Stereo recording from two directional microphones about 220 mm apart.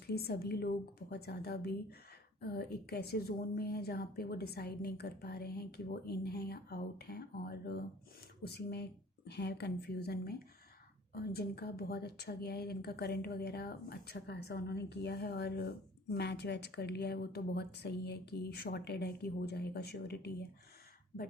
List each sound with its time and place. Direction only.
0.1 s a woman's voice: 45° left (ahead or behind)